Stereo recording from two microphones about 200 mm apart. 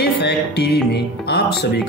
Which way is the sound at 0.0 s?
55° left (ahead or behind).